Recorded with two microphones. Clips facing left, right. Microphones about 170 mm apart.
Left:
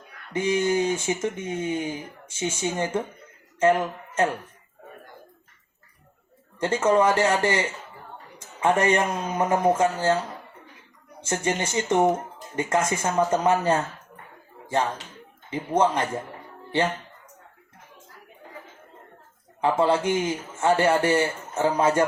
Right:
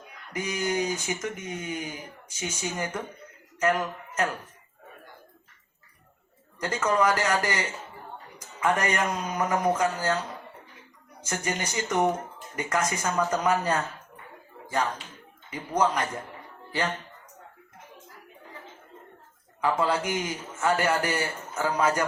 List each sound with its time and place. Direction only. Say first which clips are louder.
0.3 s speech: left 6 dB; 25° left (ahead or behind)
6.6 s speech: left 5 dB; 25° left (ahead or behind)
19.6 s speech: left 4 dB; 25° left (ahead or behind)